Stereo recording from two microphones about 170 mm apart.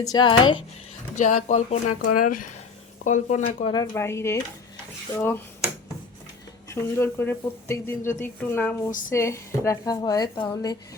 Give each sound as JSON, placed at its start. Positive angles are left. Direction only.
{"t": 0.0, "sound": "a woman's voice", "side_deg": 25}
{"t": 1.1, "sound": "speech", "side_deg": 45}
{"t": 3.9, "sound": "speech", "side_deg": 15}
{"t": 6.7, "sound": "a woman's voice", "side_deg": 15}